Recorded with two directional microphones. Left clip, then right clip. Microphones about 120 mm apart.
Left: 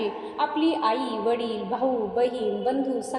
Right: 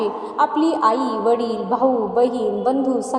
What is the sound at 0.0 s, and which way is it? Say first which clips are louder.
A woman's voice: right 7 dB; 35° right (ahead or behind).